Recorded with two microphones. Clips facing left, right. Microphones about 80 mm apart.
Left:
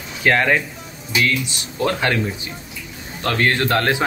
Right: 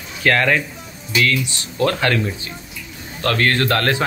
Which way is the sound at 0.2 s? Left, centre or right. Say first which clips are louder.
Even; centre.